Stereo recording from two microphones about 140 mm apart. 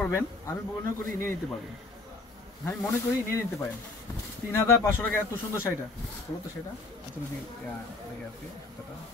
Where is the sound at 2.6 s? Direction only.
20° left (ahead or behind).